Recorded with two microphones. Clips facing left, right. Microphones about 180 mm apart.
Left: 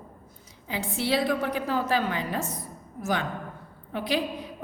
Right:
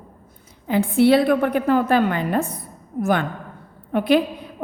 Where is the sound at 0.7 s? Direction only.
55° right (ahead or behind).